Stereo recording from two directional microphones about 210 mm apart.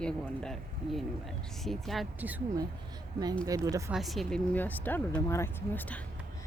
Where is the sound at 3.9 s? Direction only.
Centre (ahead or behind).